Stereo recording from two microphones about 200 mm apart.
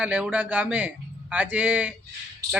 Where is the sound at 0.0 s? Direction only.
5° right (ahead or behind).